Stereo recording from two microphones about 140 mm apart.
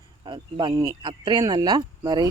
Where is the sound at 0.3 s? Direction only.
35° right (ahead or behind).